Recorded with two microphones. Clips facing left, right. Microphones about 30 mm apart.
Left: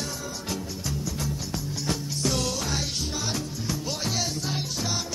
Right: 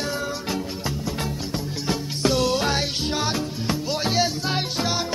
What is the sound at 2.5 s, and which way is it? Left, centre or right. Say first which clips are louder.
Music: right 7 dB; right.